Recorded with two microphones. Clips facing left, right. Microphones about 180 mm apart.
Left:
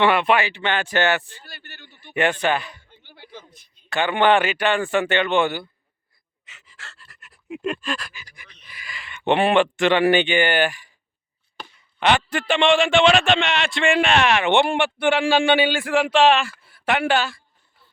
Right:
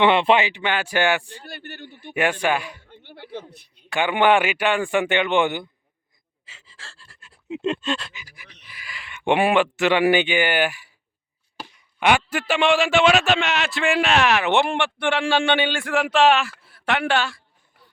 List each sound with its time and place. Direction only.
0.0 s speech: 25° right (ahead or behind)
1.4 s a man's voice: 55° right (ahead or behind)
2.1 s speech: 10° right (ahead or behind)
2.8 s speech: 60° right (ahead or behind)
3.8 s speech: 15° right (ahead or behind)
6.4 s pant: 30° right (ahead or behind)
8.2 s pant: 5° right (ahead or behind)
8.6 s a man's voice: 5° right (ahead or behind)